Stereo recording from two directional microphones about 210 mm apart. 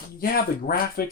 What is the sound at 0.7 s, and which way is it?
Speech, 45° left (ahead or behind).